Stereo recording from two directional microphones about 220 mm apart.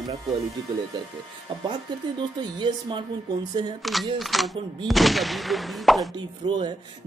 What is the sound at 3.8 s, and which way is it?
Speech, centre (ahead or behind).